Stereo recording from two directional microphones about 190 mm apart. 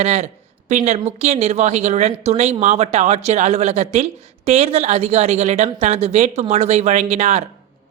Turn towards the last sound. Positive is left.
turn(degrees=-35)  # may be behind; listen again after turning